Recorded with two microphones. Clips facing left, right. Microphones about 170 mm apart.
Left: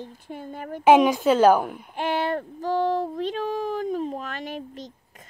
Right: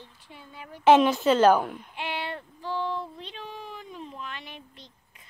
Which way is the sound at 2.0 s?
45° left (ahead or behind).